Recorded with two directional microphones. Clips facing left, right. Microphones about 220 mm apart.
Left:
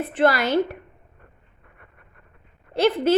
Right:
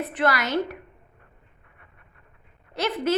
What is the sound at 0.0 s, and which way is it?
Speech, 30° left (ahead or behind).